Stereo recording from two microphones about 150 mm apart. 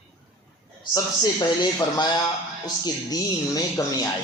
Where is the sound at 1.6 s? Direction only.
30° left (ahead or behind).